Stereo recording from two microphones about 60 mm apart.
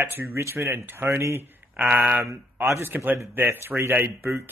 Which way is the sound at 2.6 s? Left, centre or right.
Right.